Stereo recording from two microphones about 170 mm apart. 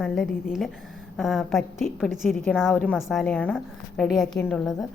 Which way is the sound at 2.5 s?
10° left (ahead or behind).